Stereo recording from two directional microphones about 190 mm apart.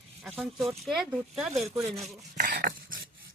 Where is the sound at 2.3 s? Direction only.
50° right (ahead or behind).